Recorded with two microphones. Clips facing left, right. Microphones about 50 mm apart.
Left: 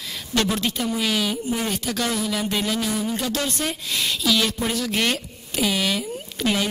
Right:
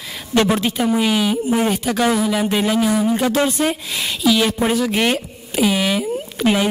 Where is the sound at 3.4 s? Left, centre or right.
Centre.